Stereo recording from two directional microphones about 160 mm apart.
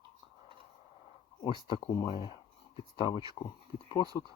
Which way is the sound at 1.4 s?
30° left (ahead or behind).